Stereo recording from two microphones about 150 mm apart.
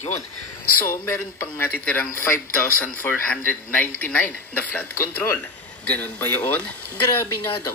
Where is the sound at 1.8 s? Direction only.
10° left (ahead or behind).